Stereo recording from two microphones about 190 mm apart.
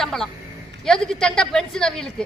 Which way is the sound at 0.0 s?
Centre (ahead or behind).